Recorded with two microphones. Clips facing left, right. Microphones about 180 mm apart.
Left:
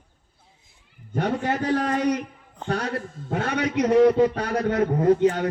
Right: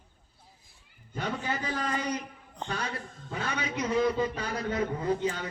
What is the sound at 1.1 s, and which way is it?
A man's voice, 65° left (ahead or behind).